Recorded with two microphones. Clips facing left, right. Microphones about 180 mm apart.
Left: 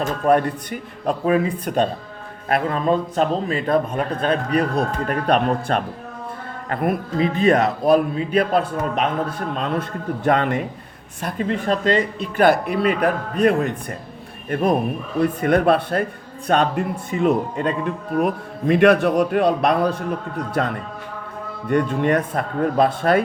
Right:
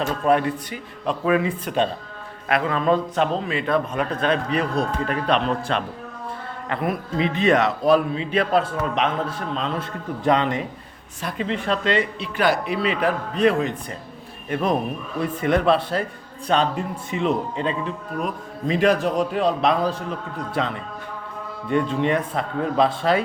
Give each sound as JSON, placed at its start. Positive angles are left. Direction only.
{"t": 0.3, "sound": "speech", "side_deg": 45}
{"t": 9.6, "sound": "speech", "side_deg": 55}
{"t": 15.2, "sound": "speech", "side_deg": 50}
{"t": 21.7, "sound": "speech", "side_deg": 45}